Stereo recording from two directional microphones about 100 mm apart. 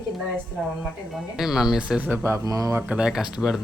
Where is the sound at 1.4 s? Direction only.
5° right (ahead or behind).